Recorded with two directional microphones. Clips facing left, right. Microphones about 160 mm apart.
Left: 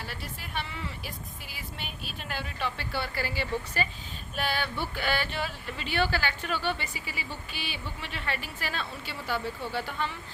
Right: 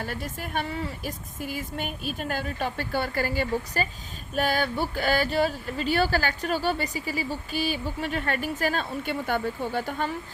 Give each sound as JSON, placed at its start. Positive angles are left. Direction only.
{"t": 0.0, "sound": "speech", "side_deg": -45}